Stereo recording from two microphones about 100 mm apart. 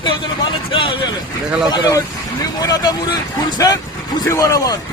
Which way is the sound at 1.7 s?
35° left (ahead or behind).